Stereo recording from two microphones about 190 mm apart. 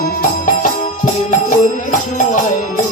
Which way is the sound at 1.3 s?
40° left (ahead or behind).